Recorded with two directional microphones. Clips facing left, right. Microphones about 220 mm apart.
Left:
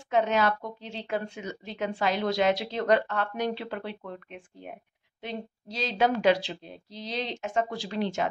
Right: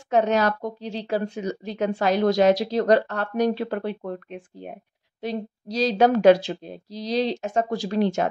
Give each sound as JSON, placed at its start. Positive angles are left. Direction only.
{"t": 0.1, "sound": "a woman's voice", "side_deg": -40}